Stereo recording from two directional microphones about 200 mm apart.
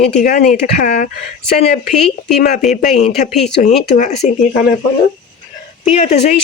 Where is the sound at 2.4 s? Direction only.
40° left (ahead or behind).